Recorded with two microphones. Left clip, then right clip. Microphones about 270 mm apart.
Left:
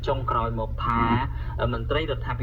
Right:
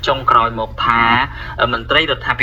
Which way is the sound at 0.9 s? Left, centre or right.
Centre.